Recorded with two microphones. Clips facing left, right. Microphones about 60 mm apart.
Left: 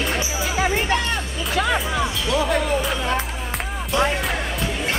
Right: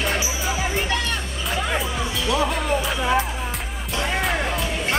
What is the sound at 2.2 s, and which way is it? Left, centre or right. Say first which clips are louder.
Music: even; centre.